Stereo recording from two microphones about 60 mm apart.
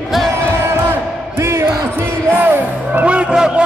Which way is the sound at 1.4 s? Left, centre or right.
Right.